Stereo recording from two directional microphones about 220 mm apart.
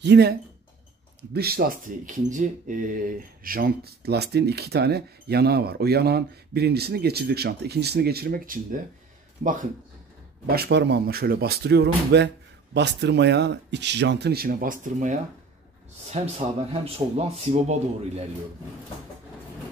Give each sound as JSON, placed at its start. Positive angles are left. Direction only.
{"t": 0.0, "sound": "a man's voice", "side_deg": -45}